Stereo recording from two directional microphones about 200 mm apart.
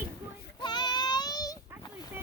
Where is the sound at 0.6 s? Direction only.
20° left (ahead or behind).